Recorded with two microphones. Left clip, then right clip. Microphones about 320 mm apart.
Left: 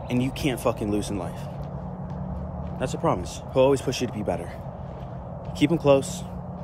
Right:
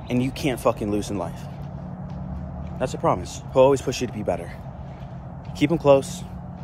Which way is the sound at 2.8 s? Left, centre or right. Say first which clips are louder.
Right 3 dB; centre.